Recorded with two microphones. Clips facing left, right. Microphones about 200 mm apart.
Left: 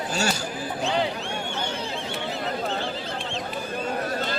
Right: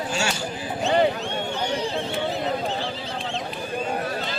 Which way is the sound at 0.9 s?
55° right (ahead or behind).